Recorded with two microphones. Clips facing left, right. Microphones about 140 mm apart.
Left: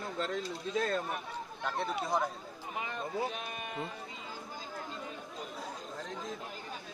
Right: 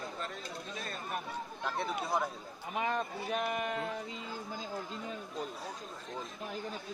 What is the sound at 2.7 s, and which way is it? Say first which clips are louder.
Speech: right 3 dB; 70° right (ahead or behind).